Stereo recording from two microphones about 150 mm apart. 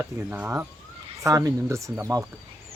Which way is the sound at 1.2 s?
20° right (ahead or behind).